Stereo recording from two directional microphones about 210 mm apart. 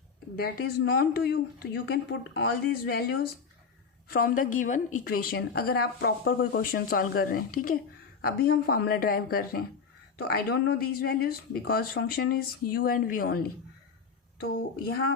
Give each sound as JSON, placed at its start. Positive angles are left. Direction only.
{"t": 0.3, "sound": "a woman's voice", "side_deg": 45}